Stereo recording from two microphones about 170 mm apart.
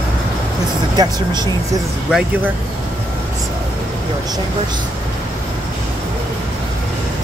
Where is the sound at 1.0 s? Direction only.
25° right (ahead or behind).